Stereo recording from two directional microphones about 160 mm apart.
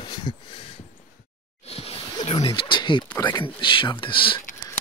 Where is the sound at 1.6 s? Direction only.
40° left (ahead or behind).